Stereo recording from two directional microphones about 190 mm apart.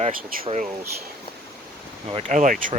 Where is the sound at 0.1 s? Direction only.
45° right (ahead or behind).